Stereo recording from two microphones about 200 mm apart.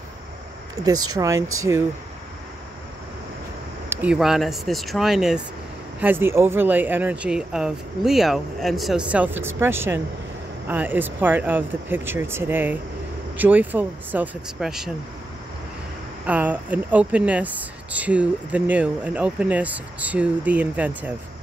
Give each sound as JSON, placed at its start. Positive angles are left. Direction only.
{"t": 1.1, "sound": "speech", "side_deg": -15}
{"t": 3.9, "sound": "speech", "side_deg": -5}
{"t": 16.3, "sound": "speech", "side_deg": -10}